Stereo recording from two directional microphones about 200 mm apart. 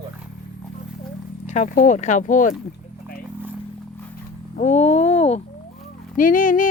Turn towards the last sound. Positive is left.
turn(degrees=40)  # may be behind; listen again after turning